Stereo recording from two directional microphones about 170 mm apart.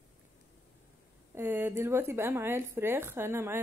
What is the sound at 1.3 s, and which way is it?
Speech, 15° right (ahead or behind).